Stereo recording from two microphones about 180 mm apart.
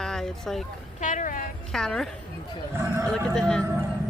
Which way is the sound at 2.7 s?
15° right (ahead or behind).